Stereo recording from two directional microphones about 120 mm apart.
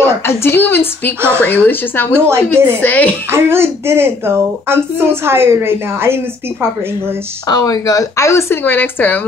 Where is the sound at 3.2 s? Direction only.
20° right (ahead or behind).